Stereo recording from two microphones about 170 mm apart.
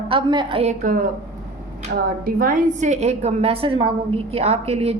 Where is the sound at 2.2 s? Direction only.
55° right (ahead or behind); by 5.0 s 35° right (ahead or behind).